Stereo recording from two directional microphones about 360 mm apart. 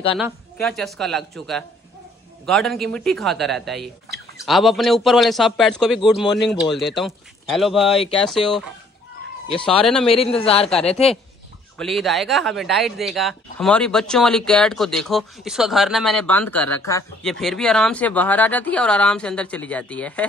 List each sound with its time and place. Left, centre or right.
0.2 s speech: centre
10.0 s a man's voice: centre
11.8 s speech: centre